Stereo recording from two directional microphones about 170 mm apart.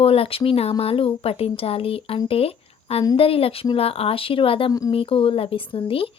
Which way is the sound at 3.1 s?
35° left (ahead or behind).